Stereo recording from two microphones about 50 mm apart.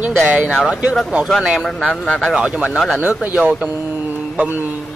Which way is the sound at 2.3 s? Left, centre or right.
Centre.